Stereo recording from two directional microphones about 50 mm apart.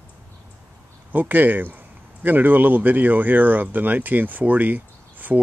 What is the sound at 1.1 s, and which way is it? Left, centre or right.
Speech, right.